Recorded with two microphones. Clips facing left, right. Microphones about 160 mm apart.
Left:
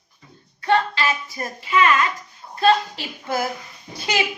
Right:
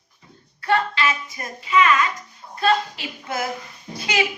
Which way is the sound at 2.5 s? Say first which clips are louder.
Left 3 dB; 30° left (ahead or behind).